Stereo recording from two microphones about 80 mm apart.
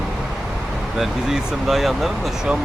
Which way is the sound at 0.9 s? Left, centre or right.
Centre.